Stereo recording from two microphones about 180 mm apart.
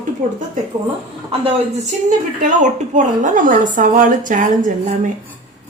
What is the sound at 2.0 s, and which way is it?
A woman's voice, 45° right (ahead or behind).